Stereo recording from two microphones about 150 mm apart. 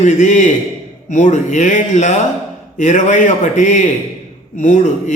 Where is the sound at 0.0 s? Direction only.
50° left (ahead or behind).